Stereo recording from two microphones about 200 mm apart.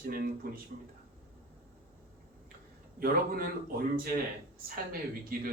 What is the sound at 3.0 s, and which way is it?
Speech, 45° right (ahead or behind).